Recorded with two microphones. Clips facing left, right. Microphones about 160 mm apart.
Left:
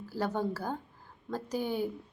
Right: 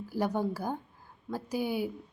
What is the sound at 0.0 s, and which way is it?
A woman's voice, 15° right (ahead or behind).